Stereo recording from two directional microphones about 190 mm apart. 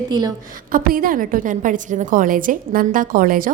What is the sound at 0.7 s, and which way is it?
A woman's voice, 50° right (ahead or behind).